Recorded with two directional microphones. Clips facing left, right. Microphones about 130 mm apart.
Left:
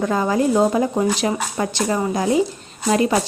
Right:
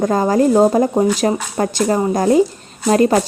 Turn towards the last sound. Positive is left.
turn(degrees=-45)  # may be behind; listen again after turning